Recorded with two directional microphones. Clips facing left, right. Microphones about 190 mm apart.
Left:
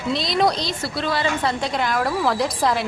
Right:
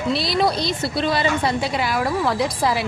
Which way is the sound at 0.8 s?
20° right (ahead or behind).